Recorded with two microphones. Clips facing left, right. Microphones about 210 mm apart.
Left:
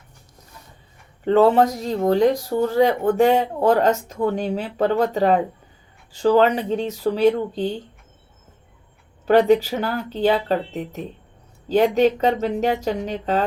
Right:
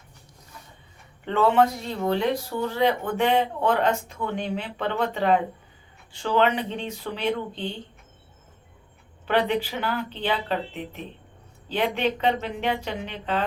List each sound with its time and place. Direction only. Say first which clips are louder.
1.2 s speech: left 5 dB; 40° left (ahead or behind)
9.2 s speech: left 9 dB; 40° left (ahead or behind)